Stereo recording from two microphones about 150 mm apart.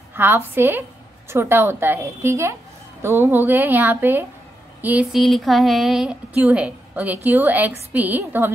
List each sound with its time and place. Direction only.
0.1 s a sound: 15° right (ahead or behind)
0.6 s a woman's voice: 15° right (ahead or behind)
5.2 s a woman's voice: centre (ahead or behind)